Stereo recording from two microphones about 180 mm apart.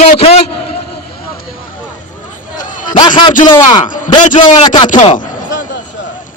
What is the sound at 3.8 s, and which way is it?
Speech, 45° left (ahead or behind).